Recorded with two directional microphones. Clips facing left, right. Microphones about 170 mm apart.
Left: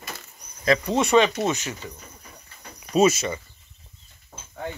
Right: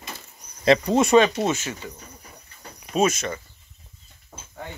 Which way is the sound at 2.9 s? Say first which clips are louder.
Left 3 dB; 5° left (ahead or behind).